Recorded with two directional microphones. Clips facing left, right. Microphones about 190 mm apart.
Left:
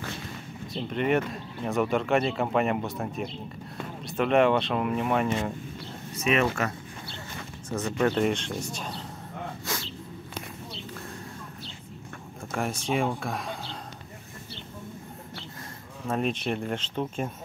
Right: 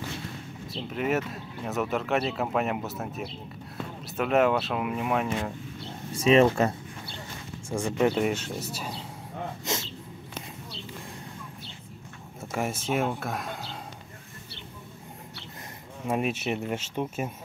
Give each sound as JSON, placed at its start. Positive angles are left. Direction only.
{"t": 0.7, "sound": "speech", "side_deg": -5}
{"t": 6.1, "sound": "speech", "side_deg": -30}
{"t": 7.7, "sound": "speech", "side_deg": -10}
{"t": 9.7, "sound": "a sound", "side_deg": -20}
{"t": 12.4, "sound": "speech", "side_deg": -5}
{"t": 16.1, "sound": "speech", "side_deg": -10}